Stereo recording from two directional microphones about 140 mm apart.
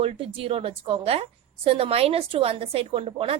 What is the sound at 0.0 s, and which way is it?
A woman's voice, 40° right (ahead or behind).